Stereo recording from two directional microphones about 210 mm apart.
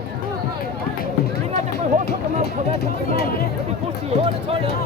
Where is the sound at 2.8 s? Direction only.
50° left (ahead or behind).